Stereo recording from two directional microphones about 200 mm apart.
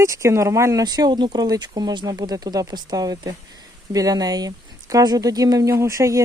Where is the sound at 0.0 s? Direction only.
15° right (ahead or behind).